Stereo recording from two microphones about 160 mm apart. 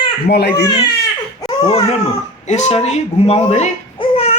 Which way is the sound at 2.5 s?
45° left (ahead or behind).